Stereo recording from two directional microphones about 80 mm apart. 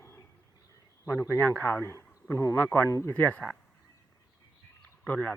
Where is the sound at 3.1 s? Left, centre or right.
Centre.